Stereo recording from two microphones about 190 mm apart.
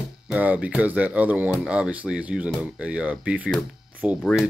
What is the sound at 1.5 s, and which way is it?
Speech, 5° right (ahead or behind).